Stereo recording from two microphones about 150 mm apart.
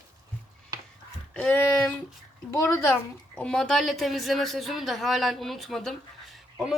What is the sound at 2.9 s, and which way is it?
A child's voice, 5° left (ahead or behind).